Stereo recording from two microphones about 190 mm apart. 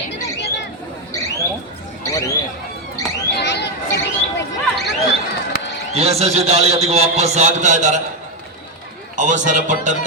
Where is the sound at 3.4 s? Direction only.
65° left (ahead or behind).